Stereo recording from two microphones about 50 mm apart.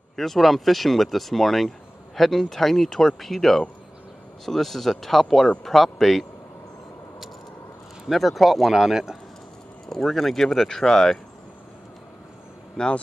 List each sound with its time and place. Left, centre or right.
0.1 s speech: centre
8.1 s speech: centre
9.8 s speech: centre
12.7 s speech: centre